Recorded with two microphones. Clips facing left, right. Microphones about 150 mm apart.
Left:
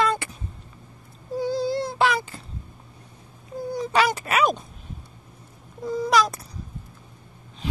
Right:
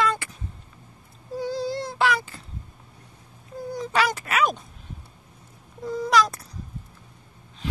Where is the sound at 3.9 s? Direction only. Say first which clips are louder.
Left 2 dB; 20° left (ahead or behind).